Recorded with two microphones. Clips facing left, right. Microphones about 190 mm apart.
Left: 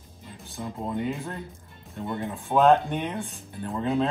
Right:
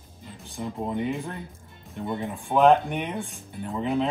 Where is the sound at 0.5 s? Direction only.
15° right (ahead or behind).